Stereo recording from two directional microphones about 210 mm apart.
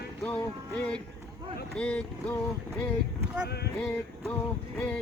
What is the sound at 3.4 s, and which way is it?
Speech, 50° left (ahead or behind).